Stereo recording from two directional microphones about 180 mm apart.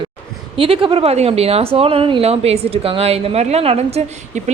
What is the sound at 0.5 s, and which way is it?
Speech, 30° right (ahead or behind).